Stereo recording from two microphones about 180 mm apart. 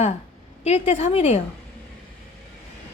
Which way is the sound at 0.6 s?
35° left (ahead or behind).